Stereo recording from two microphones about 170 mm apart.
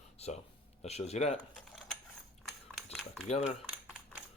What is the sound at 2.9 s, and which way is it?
Cutlery, centre (ahead or behind).